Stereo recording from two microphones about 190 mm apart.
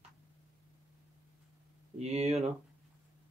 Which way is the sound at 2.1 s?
35° right (ahead or behind).